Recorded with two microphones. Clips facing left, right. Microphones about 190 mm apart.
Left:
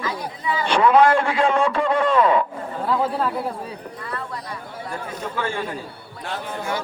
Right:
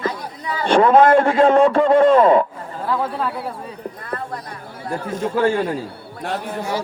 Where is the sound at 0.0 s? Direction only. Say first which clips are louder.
Right 2 dB; 40° right (ahead or behind).